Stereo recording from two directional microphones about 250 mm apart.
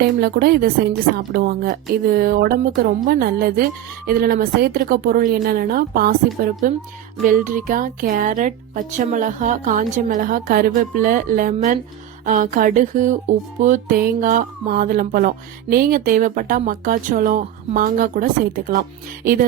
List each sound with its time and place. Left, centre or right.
0.0 s music: right